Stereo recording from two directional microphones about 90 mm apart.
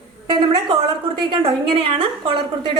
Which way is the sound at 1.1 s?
75° right (ahead or behind).